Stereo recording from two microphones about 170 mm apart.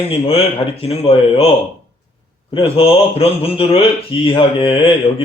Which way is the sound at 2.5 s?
35° left (ahead or behind).